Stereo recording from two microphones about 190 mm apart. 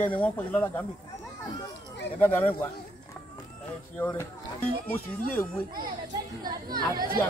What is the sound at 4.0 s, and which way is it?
Speech, 10° left (ahead or behind).